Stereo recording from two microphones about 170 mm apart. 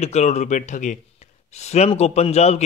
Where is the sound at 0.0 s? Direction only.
40° left (ahead or behind).